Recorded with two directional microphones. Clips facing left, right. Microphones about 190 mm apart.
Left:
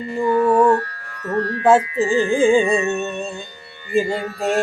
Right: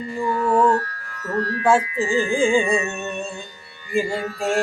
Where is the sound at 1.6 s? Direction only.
20° left (ahead or behind).